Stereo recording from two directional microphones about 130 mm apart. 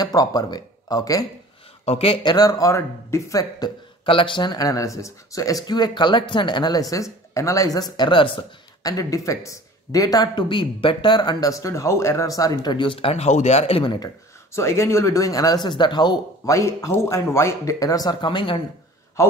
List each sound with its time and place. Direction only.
0.0 s speech: 30° left (ahead or behind)
1.9 s speech: 50° left (ahead or behind)
2.2 s speech: 30° left (ahead or behind)
4.0 s speech: 40° left (ahead or behind)
8.8 s speech: 25° left (ahead or behind); by 13.9 s 50° left (ahead or behind)
13.9 s speech: 25° left (ahead or behind)
19.2 s speech: 20° left (ahead or behind)